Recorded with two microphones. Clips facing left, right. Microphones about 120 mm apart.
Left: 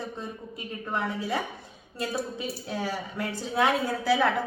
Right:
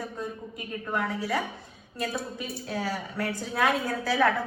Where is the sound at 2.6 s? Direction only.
15° left (ahead or behind).